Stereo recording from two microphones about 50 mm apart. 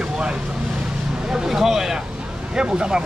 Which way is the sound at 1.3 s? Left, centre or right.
Centre.